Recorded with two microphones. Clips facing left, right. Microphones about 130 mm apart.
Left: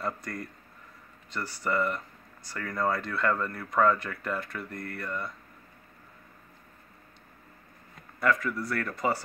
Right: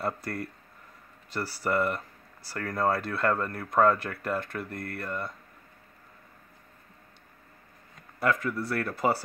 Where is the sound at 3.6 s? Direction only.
5° right (ahead or behind).